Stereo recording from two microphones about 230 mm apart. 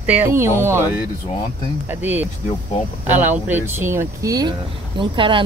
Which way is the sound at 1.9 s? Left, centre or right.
Centre.